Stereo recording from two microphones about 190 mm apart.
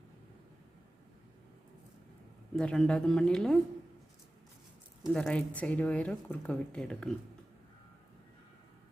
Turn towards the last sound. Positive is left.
turn(degrees=5)  # may be behind; listen again after turning